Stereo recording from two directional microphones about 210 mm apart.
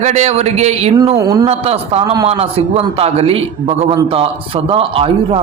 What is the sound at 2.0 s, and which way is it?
Speech, 20° right (ahead or behind).